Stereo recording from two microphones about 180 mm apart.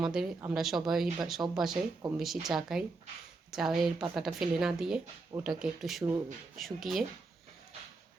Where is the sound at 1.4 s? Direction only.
15° right (ahead or behind).